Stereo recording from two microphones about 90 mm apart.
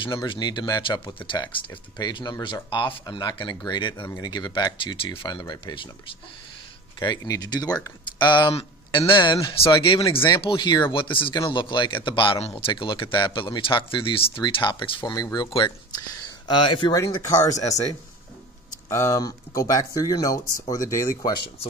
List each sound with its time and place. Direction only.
0.0 s speech: 60° left (ahead or behind)
4.9 s speech: 75° left (ahead or behind); by 5.9 s 50° left (ahead or behind)
7.2 s speech: 45° left (ahead or behind)
8.2 s speech: 60° left (ahead or behind)
9.5 s speech: 75° left (ahead or behind)
11.3 s speech: 60° left (ahead or behind); by 14.4 s 80° left
14.4 s speech: 60° left (ahead or behind)
16.4 s speech: 60° left (ahead or behind)
17.2 s speech: 40° left (ahead or behind)
18.9 s speech: 35° left (ahead or behind)
21.2 s speech: 55° left (ahead or behind)